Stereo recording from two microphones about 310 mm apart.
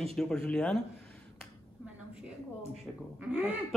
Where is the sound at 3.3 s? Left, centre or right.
Centre.